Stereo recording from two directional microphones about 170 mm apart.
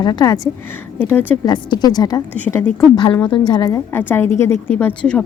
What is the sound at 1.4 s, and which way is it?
Speech, 25° left (ahead or behind).